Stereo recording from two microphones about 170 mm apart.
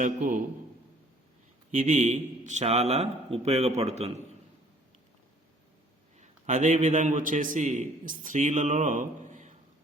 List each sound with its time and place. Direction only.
0.0 s a man's voice: 50° right (ahead or behind)
1.7 s a man's voice: 50° right (ahead or behind)
6.1 s a man's voice: 45° right (ahead or behind)